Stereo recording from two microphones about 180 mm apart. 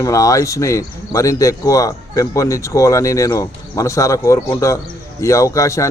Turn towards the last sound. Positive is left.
turn(degrees=15)  # may be behind; listen again after turning